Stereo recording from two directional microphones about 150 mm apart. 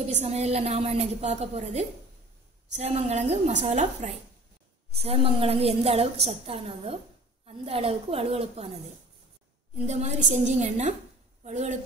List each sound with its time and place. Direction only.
0.0 s a woman's voice: 45° right (ahead or behind)
9.8 s a woman's voice: 50° right (ahead or behind)